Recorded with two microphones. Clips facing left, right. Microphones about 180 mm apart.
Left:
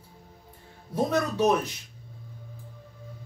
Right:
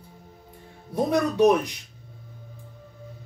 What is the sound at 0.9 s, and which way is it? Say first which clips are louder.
Speech: right 3 dB; 15° right (ahead or behind).